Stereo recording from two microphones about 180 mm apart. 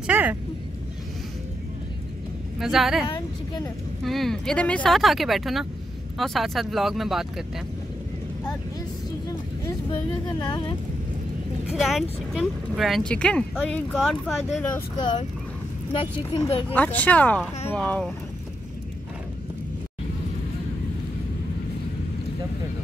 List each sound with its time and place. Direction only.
0.0 s vehicle: 10° right (ahead or behind)
2.6 s speech: centre (ahead or behind)
11.6 s speech: centre (ahead or behind)
15.0 s speech: 25° left (ahead or behind)
16.7 s speech: 10° left (ahead or behind)